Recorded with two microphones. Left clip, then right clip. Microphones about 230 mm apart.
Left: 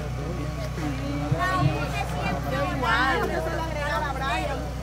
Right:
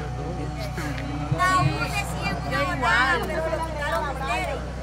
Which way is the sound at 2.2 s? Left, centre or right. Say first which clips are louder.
Right 1 dB; right.